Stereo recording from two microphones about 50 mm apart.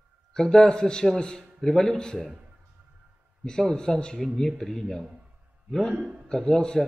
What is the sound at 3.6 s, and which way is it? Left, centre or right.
A man's voice, centre.